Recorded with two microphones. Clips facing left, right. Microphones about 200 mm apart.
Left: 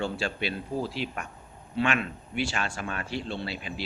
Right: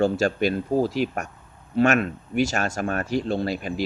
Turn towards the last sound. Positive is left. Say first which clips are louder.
# right 9 dB
turn(degrees=-45)  # may be behind; listen again after turning